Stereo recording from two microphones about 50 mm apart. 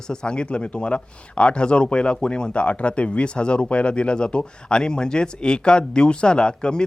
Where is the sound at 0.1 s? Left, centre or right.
Centre.